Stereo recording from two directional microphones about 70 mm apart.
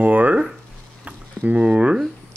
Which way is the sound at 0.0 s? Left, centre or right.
Right.